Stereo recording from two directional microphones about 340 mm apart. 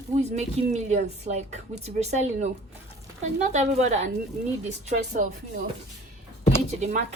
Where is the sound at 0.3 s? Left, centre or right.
Centre.